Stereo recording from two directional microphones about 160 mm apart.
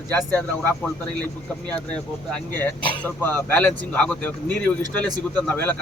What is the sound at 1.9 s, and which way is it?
Speech, 10° left (ahead or behind).